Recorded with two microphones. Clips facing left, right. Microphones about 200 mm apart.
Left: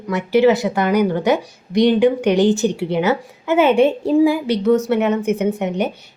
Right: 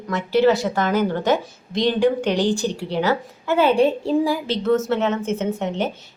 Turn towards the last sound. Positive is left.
turn(degrees=15)  # may be behind; listen again after turning